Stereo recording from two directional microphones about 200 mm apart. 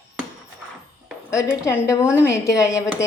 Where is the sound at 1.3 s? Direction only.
15° left (ahead or behind).